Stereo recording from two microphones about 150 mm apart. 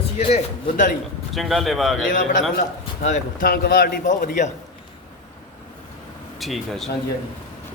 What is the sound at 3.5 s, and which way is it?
A man's voice, 90° left.